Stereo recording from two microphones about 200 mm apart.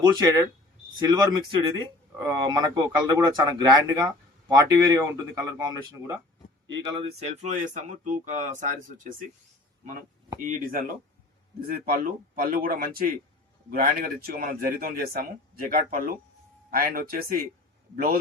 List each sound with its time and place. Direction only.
0.0 s speech: 20° right (ahead or behind)
7.3 s speech: 35° right (ahead or behind)
10.3 s a man's voice: 40° right (ahead or behind)